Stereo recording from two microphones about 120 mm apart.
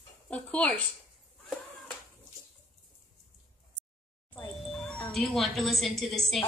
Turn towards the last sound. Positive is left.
turn(degrees=0)  # may be behind; listen again after turning